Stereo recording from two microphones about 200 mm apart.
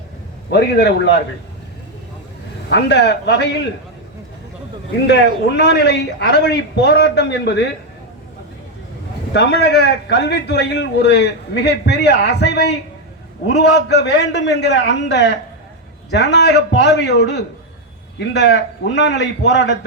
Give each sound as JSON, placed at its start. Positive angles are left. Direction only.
{"t": 0.5, "sound": "a man's voice", "side_deg": 60}
{"t": 2.6, "sound": "a man's voice", "side_deg": 60}
{"t": 5.0, "sound": "a man's voice", "side_deg": 60}
{"t": 9.3, "sound": "a man's voice", "side_deg": 60}